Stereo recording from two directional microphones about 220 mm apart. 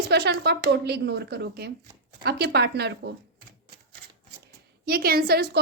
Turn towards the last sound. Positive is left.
turn(degrees=-45)  # may be behind; listen again after turning